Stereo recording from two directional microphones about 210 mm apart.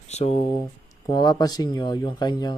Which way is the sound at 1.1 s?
20° left (ahead or behind).